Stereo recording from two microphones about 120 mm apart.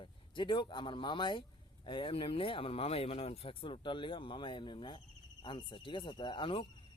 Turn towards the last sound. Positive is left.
turn(degrees=45)  # may be behind; listen again after turning